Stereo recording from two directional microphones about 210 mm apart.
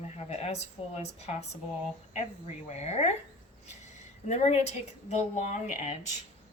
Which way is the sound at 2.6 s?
30° left (ahead or behind).